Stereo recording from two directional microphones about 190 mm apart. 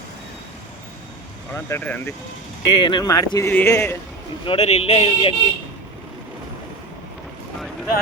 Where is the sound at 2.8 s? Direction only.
25° left (ahead or behind).